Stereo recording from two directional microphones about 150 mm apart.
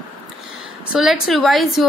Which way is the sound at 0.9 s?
5° right (ahead or behind).